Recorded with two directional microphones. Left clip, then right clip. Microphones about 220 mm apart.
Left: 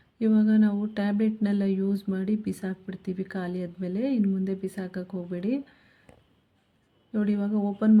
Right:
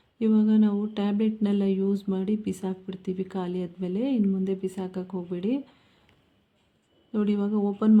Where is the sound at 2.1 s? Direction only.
20° left (ahead or behind).